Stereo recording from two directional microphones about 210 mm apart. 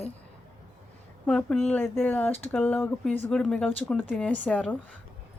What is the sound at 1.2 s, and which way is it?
Speech, 5° left (ahead or behind).